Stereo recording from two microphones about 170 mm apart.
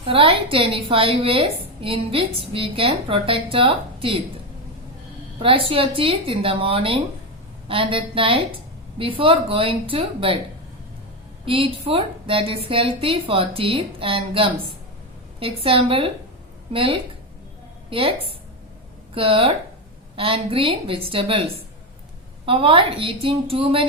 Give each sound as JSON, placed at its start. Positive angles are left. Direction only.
{"t": 0.0, "sound": "a woman's voice", "side_deg": -30}
{"t": 5.4, "sound": "a woman's voice", "side_deg": -30}
{"t": 11.4, "sound": "a woman's voice", "side_deg": -30}
{"t": 19.1, "sound": "a woman's voice", "side_deg": -30}
{"t": 22.4, "sound": "a woman's voice", "side_deg": -30}